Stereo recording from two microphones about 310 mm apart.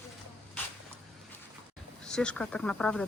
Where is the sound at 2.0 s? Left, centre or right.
Centre.